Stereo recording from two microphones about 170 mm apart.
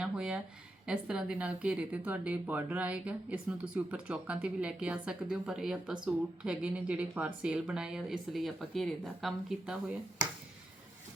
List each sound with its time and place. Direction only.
0.0 s speech: 5° right (ahead or behind)